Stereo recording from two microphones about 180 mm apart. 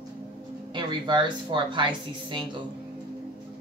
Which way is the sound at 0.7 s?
25° right (ahead or behind).